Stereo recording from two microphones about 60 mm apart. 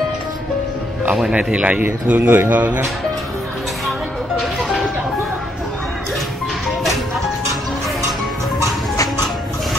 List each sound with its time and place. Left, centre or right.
1.3 s mantra: right
2.0 s mantra: right
4.4 s music: centre